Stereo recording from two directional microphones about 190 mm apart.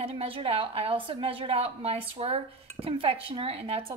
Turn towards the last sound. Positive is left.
turn(degrees=-30)  # may be behind; listen again after turning